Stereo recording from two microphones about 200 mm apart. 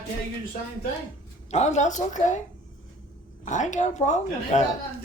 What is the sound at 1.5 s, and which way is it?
Speech, 35° left (ahead or behind).